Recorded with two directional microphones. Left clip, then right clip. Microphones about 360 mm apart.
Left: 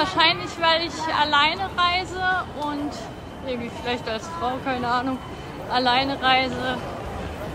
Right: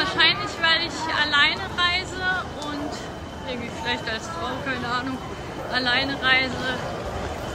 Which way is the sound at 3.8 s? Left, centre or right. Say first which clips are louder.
Right 2 dB; centre.